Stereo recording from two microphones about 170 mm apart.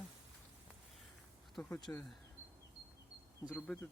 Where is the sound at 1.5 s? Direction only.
5° left (ahead or behind).